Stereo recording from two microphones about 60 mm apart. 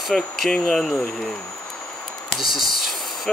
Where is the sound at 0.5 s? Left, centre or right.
Centre.